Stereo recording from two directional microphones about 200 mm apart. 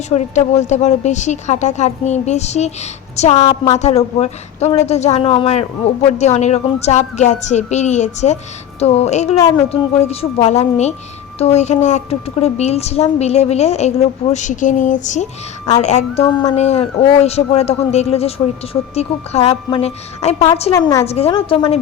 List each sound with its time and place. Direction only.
0.1 s a woman's voice: 35° left (ahead or behind)
20.7 s a woman's voice: 15° left (ahead or behind)
21.0 s a woman's voice: 30° left (ahead or behind)